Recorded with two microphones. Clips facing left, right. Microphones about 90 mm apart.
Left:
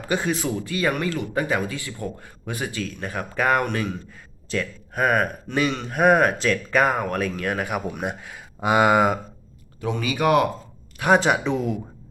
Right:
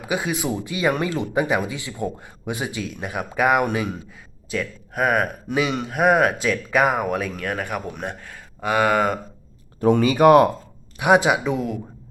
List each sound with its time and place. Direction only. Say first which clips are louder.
0.0 s speech: even; 10° right (ahead or behind)
8.6 s speech: left 2 dB; 15° left (ahead or behind)
10.0 s speech: right 6 dB; 35° right (ahead or behind)
10.9 s speech: right 2 dB; 10° right (ahead or behind)